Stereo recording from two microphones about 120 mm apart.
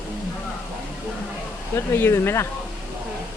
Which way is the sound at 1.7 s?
20° left (ahead or behind).